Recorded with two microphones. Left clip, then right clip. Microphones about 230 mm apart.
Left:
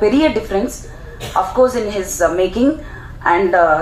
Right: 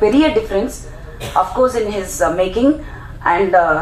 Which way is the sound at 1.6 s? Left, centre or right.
Left.